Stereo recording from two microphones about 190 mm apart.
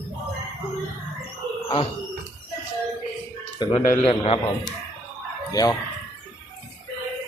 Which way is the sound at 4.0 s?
30° left (ahead or behind).